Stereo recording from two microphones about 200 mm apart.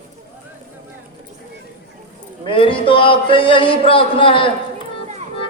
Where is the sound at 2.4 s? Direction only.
25° left (ahead or behind).